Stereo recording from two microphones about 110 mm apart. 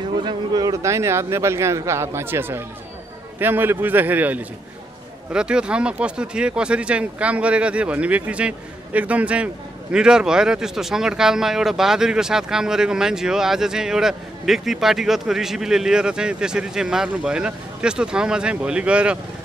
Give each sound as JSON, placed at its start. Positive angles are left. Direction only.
{"t": 0.2, "sound": "speech", "side_deg": -40}
{"t": 0.8, "sound": "speech", "side_deg": -25}